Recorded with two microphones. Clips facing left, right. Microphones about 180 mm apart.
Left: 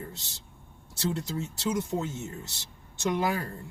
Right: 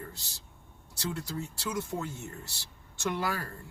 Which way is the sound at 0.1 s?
25° left (ahead or behind).